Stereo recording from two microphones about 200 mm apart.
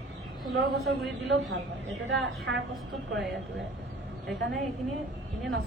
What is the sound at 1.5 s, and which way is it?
A woman's voice, 60° right (ahead or behind).